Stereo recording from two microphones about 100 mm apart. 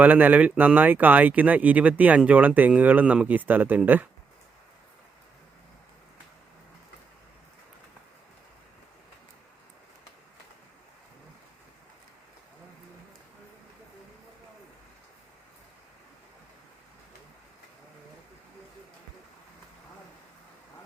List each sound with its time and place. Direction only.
0.0 s speech: 15° right (ahead or behind)